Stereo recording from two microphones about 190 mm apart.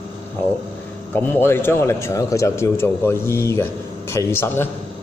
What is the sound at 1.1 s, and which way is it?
A man's voice, 10° left (ahead or behind).